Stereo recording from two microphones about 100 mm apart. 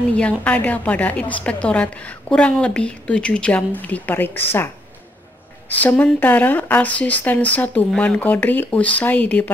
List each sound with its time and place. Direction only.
0.1 s a woman's voice: 10° left (ahead or behind)
5.8 s a woman's voice: 15° left (ahead or behind)